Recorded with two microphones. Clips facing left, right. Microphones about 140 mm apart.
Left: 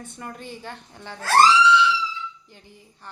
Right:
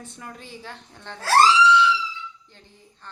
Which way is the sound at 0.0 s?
Centre (ahead or behind).